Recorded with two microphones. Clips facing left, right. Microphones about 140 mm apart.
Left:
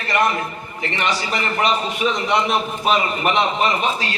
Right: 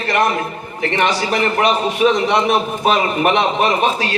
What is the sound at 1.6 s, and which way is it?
A man's voice, 60° right (ahead or behind).